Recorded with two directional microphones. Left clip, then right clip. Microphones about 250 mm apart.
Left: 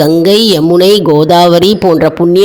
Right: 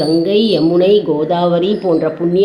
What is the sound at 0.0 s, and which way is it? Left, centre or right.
A woman's voice, left.